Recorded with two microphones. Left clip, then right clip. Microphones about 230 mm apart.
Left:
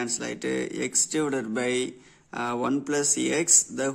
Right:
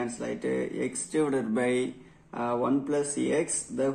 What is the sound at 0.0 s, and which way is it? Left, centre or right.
Speech, left.